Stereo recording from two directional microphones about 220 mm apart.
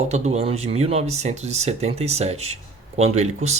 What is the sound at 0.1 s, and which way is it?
Speech, 30° right (ahead or behind).